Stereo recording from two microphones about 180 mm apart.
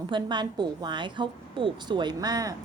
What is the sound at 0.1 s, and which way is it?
A woman's voice, 25° right (ahead or behind).